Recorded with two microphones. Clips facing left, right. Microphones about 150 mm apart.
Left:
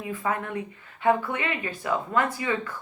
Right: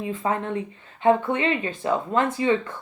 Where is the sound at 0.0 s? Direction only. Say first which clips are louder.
Right 3 dB; 25° right (ahead or behind).